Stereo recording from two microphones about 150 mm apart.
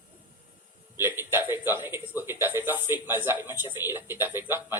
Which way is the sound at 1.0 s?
15° right (ahead or behind).